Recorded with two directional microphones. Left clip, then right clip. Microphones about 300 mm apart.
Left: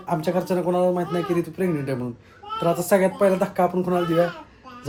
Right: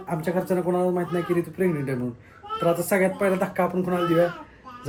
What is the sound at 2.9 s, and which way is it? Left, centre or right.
Speech, centre.